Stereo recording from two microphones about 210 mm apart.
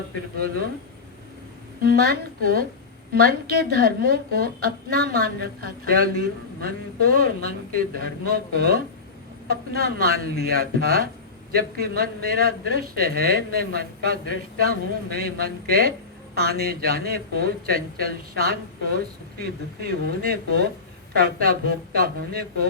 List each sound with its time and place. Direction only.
0.3 s a woman's voice: 45° right (ahead or behind)
1.8 s a woman's voice: 45° right (ahead or behind)